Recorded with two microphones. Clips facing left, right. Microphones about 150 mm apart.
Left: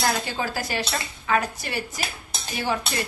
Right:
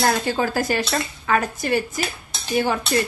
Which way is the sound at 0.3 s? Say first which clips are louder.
Right 6 dB; 50° right (ahead or behind).